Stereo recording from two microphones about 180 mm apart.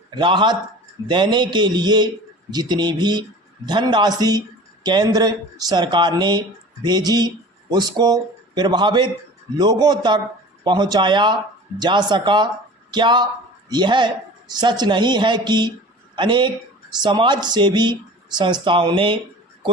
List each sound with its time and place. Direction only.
0.1 s speech: 25° right (ahead or behind)